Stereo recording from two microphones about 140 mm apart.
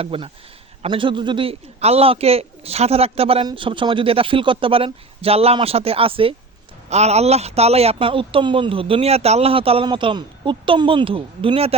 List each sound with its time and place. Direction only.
0.0 s speech: 40° right (ahead or behind)
6.9 s speech: 50° right (ahead or behind)